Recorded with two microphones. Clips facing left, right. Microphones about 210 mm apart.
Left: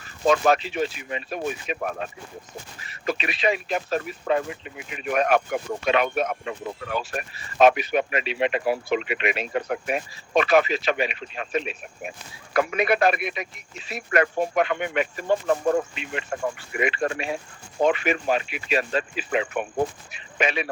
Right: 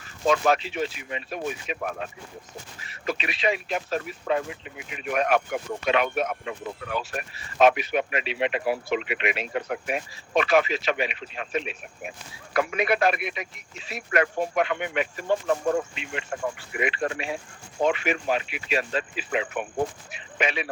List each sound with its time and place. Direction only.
0.3 s speech: 40° left (ahead or behind)